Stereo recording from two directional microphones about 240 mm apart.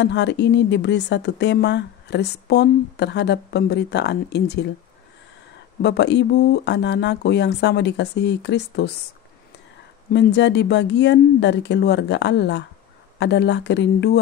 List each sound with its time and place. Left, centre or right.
0.0 s speech: left
5.8 s speech: left
10.1 s speech: left